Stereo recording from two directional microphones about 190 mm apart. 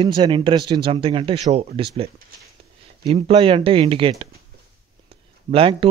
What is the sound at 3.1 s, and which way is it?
Speech, 30° right (ahead or behind).